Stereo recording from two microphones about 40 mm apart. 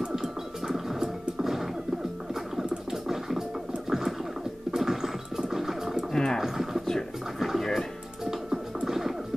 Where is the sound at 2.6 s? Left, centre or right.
Right.